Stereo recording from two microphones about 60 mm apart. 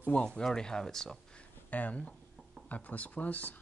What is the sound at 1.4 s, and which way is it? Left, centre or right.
Speech, left.